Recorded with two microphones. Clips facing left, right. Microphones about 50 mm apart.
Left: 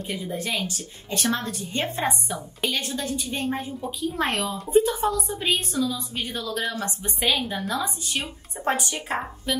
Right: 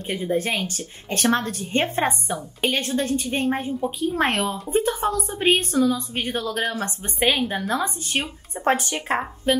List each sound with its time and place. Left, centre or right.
0.0 s a woman's voice: right